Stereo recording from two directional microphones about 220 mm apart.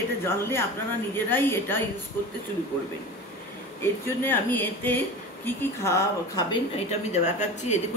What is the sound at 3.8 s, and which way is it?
A woman's voice, 10° left (ahead or behind).